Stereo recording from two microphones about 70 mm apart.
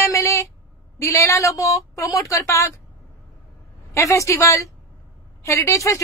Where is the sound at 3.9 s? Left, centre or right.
Left.